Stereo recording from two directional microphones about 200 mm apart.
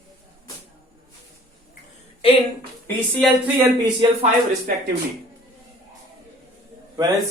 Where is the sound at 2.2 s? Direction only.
30° left (ahead or behind).